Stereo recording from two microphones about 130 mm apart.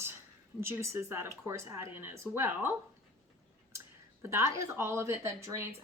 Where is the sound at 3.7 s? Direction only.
20° right (ahead or behind).